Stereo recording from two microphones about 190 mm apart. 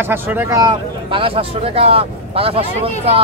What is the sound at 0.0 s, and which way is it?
Speech, 10° right (ahead or behind).